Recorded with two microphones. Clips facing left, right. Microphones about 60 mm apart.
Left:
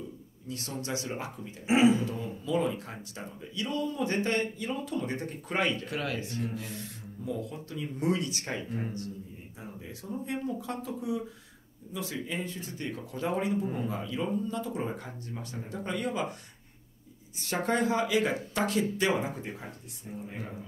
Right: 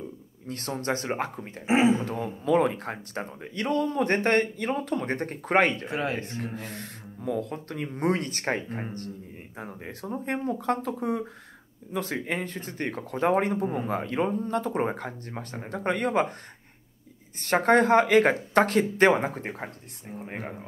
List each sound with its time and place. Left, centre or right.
0.5 s speech: right
1.7 s speech: right
2.1 s speech: right
5.9 s speech: right
6.4 s speech: right
17.4 s speech: right